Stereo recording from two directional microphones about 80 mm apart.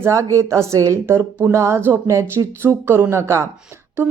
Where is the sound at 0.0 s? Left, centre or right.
Right.